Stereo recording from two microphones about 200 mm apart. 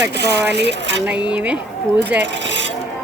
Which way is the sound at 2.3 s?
65° right (ahead or behind).